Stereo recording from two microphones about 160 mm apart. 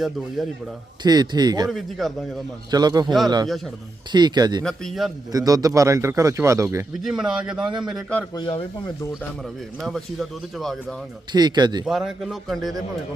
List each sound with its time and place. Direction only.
1.0 s speech: 25° right (ahead or behind)
1.7 s speech: centre (ahead or behind)
2.6 s speech: 25° right (ahead or behind)
4.6 s speech: centre (ahead or behind)
5.3 s speech: 25° right (ahead or behind)
7.0 s speech: 5° right (ahead or behind)
7.6 s speech: 30° right (ahead or behind)
8.3 s speech: 30° left (ahead or behind)
9.4 s speech: centre (ahead or behind)
11.3 s speech: 25° right (ahead or behind)
11.9 s speech: centre (ahead or behind)